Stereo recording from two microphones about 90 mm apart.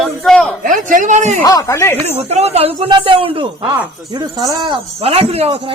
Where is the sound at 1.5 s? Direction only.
40° left (ahead or behind).